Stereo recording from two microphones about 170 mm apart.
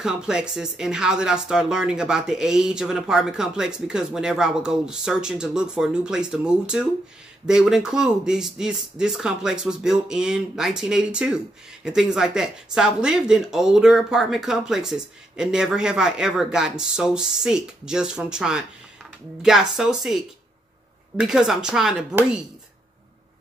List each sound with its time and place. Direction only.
0.0 s speech: 5° right (ahead or behind)
21.2 s speech: 5° right (ahead or behind)